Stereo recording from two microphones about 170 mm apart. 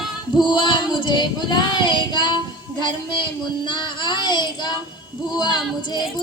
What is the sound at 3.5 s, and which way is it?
A woman's voice, 25° left (ahead or behind).